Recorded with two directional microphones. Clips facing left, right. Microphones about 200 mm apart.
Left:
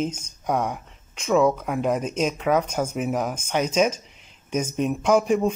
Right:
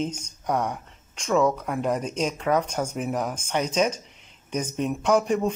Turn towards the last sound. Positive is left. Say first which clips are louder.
# left 2 dB
turn(degrees=10)  # may be behind; listen again after turning